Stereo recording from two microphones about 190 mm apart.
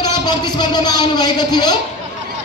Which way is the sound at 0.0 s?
20° left (ahead or behind).